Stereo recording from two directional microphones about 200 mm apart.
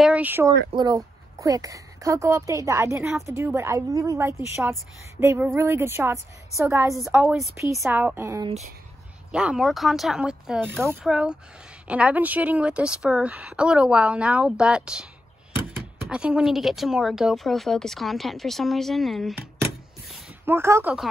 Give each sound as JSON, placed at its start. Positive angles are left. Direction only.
{"t": 0.0, "sound": "speech", "side_deg": -5}
{"t": 0.7, "sound": "speech", "side_deg": -20}
{"t": 3.0, "sound": "speech", "side_deg": 0}
{"t": 3.3, "sound": "speech", "side_deg": -15}
{"t": 20.4, "sound": "speech", "side_deg": -10}